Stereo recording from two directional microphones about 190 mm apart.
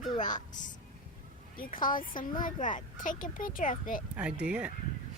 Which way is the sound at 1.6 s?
45° left (ahead or behind).